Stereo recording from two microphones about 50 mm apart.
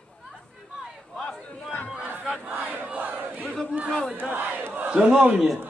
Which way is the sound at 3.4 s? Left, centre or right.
Centre.